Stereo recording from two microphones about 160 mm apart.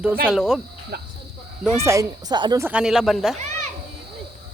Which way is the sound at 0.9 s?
75° right (ahead or behind).